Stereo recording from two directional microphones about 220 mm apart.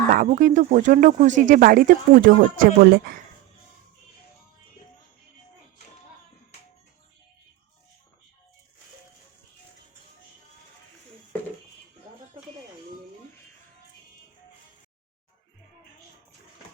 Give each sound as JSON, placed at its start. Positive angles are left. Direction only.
{"t": 0.1, "sound": "speech", "side_deg": -35}